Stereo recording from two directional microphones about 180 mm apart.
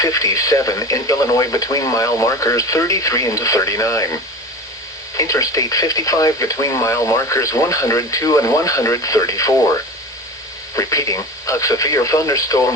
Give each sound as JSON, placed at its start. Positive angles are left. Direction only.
{"t": 0.0, "sound": "speech", "side_deg": 20}
{"t": 5.1, "sound": "speech", "side_deg": 20}
{"t": 10.8, "sound": "speech", "side_deg": 15}